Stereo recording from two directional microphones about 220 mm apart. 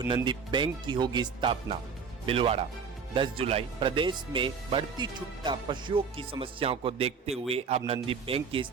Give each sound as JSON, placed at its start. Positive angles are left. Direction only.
{"t": 0.1, "sound": "speech", "side_deg": -20}